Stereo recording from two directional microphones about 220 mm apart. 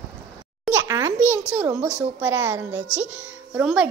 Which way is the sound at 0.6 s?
10° right (ahead or behind).